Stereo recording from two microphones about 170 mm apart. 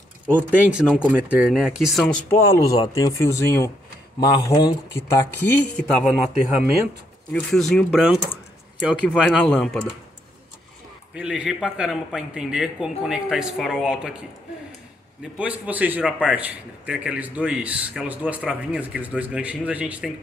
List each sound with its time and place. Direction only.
0.4 s speech: 5° right (ahead or behind)
2.3 s speech: 15° left (ahead or behind)
5.8 s speech: centre (ahead or behind)
7.3 s speech: 5° left (ahead or behind)
11.1 s speech: 5° right (ahead or behind)
15.3 s a man's voice: 5° right (ahead or behind)